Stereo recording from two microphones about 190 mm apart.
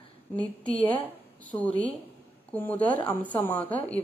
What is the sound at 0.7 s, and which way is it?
A woman's voice, 5° left (ahead or behind).